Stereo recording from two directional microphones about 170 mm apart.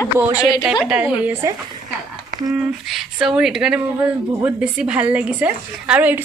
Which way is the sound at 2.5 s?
Centre (ahead or behind).